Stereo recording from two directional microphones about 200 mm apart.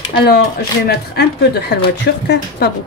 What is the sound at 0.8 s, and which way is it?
A woman's voice, 55° left (ahead or behind).